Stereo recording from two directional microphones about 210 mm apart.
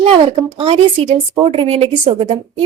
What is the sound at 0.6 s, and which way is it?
A woman's voice, 25° right (ahead or behind).